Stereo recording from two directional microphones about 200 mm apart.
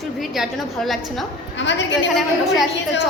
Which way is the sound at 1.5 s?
65° left (ahead or behind).